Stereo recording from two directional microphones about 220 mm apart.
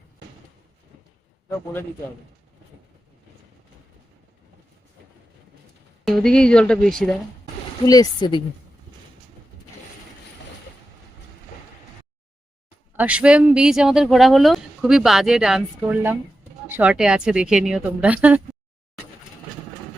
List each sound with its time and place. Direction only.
6.1 s speech: centre (ahead or behind)
7.9 s speech: 15° left (ahead or behind)
13.0 s a woman's voice: 5° right (ahead or behind)